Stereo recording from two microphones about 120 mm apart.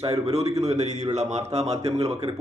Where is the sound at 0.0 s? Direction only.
60° right (ahead or behind).